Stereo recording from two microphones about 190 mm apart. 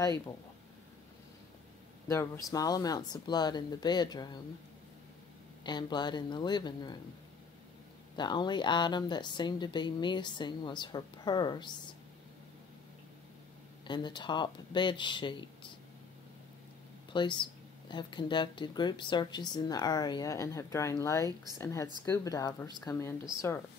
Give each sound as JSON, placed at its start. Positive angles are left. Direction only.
{"t": 2.0, "sound": "speech", "side_deg": 15}
{"t": 5.6, "sound": "speech", "side_deg": 25}
{"t": 8.2, "sound": "speech", "side_deg": 25}
{"t": 13.8, "sound": "speech", "side_deg": 25}
{"t": 17.1, "sound": "speech", "side_deg": 25}